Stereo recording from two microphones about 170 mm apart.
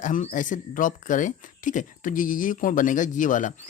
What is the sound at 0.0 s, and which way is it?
Speech, 50° left (ahead or behind).